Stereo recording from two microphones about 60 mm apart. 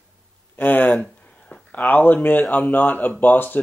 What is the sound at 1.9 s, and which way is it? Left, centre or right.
Speech, left.